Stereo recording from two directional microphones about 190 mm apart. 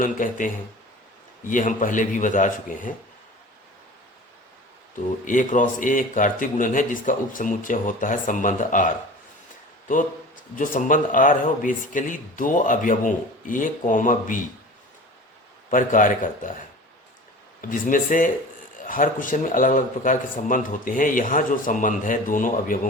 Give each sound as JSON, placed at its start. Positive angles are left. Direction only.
{"t": 0.0, "sound": "a man's voice", "side_deg": 45}
{"t": 5.2, "sound": "a man's voice", "side_deg": 45}
{"t": 9.9, "sound": "a man's voice", "side_deg": 45}
{"t": 15.7, "sound": "a man's voice", "side_deg": 45}
{"t": 17.6, "sound": "a man's voice", "side_deg": 45}